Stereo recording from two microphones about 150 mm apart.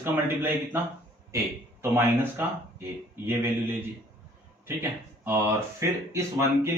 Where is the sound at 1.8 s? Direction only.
15° right (ahead or behind).